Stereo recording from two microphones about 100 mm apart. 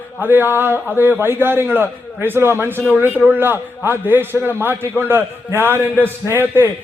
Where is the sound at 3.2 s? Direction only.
20° right (ahead or behind).